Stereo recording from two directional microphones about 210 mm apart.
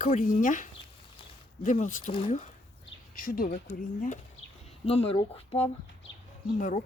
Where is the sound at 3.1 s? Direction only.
45° left (ahead or behind).